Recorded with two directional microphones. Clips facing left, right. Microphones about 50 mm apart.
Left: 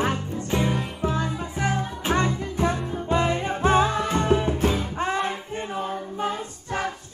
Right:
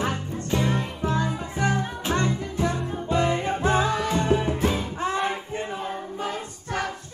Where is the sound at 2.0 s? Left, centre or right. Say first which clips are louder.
Left 1 dB; left.